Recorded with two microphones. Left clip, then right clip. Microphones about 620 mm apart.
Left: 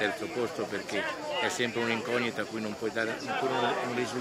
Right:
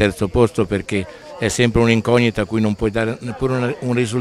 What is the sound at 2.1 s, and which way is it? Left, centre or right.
Speech, right.